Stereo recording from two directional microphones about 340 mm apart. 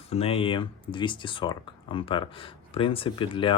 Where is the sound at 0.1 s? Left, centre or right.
Centre.